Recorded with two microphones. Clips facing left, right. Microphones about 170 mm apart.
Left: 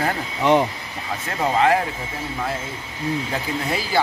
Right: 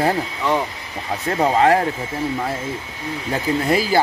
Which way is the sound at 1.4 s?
40° right (ahead or behind).